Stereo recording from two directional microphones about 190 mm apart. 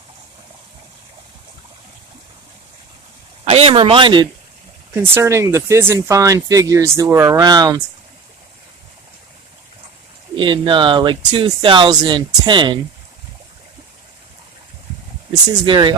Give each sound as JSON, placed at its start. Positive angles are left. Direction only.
{"t": 3.4, "sound": "speech", "side_deg": -30}
{"t": 4.9, "sound": "speech", "side_deg": -15}
{"t": 10.3, "sound": "speech", "side_deg": -25}
{"t": 15.4, "sound": "speech", "side_deg": -25}